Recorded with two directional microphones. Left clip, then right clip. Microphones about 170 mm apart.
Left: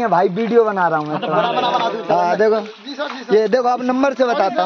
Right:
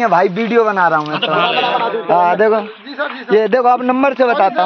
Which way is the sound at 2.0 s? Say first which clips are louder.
Right 4 dB; 10° right (ahead or behind).